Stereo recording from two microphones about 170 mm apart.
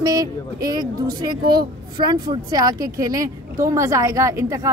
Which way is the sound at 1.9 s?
25° right (ahead or behind).